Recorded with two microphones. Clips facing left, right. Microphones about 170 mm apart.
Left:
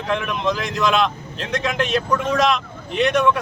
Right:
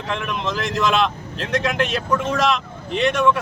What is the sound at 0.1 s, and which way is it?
Speech, centre (ahead or behind).